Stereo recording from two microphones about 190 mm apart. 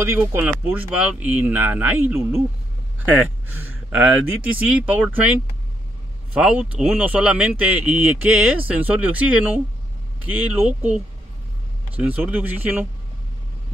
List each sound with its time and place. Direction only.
0.0 s speech: 10° right (ahead or behind)
6.3 s speech: 5° right (ahead or behind)
12.0 s speech: 10° right (ahead or behind)